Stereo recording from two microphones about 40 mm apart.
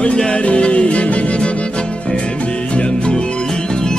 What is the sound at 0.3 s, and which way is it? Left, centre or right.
Music, left.